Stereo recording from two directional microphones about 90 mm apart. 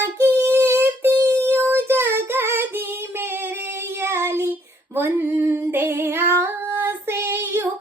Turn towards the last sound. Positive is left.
turn(degrees=-25)  # may be behind; listen again after turning